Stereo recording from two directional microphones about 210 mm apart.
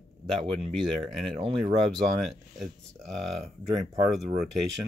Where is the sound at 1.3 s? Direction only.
25° right (ahead or behind).